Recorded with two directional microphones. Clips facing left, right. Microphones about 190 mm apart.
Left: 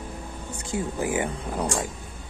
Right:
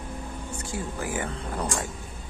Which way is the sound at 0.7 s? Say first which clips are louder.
Left 6 dB; 20° left (ahead or behind).